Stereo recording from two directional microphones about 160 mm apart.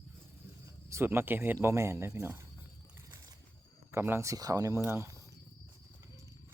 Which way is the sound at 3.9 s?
15° right (ahead or behind).